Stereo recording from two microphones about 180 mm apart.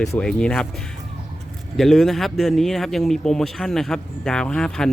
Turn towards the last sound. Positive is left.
turn(degrees=5)  # may be behind; listen again after turning